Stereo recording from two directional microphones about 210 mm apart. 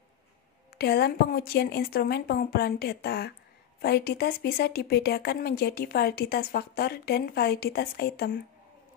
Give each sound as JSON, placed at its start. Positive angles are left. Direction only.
{"t": 0.7, "sound": "speech", "side_deg": 50}